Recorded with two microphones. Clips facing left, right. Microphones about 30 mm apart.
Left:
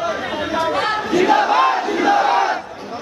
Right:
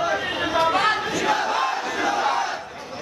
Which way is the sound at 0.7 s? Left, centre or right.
Centre.